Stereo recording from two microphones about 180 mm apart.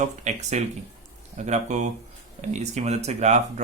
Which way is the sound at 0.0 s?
40° right (ahead or behind).